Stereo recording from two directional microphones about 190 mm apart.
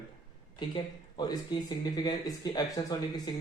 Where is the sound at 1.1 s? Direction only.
20° left (ahead or behind).